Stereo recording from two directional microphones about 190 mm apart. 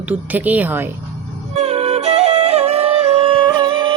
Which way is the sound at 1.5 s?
35° right (ahead or behind).